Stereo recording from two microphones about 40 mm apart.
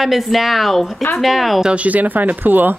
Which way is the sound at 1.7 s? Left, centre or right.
Right.